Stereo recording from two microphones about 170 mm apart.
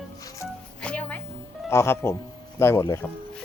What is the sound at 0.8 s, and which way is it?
Music, 5° left (ahead or behind).